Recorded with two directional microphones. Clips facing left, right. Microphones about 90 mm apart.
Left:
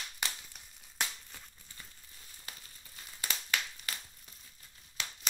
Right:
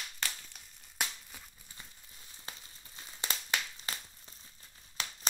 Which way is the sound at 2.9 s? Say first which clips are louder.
Right 1 dB; 25° right (ahead or behind).